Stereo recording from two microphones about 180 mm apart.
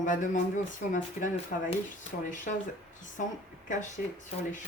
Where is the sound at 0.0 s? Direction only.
45° left (ahead or behind).